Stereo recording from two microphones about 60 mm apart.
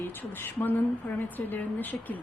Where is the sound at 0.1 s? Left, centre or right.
Left.